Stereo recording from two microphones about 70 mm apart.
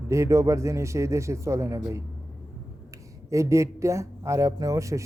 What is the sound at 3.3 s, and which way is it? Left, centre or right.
Speech, right.